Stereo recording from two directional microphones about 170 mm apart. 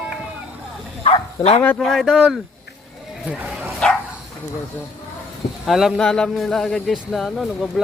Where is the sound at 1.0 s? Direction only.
35° left (ahead or behind).